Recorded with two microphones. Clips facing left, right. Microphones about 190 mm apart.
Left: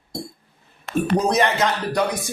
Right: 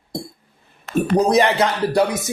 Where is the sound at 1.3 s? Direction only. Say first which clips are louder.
Right 3 dB; 35° right (ahead or behind).